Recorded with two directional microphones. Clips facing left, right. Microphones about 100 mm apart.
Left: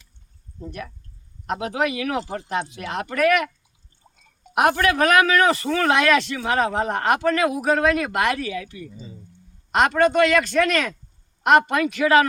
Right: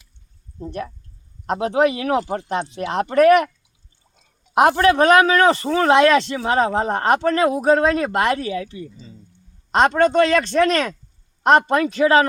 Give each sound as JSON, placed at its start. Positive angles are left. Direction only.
{"t": 0.6, "sound": "speech", "side_deg": -35}
{"t": 4.5, "sound": "speech", "side_deg": -30}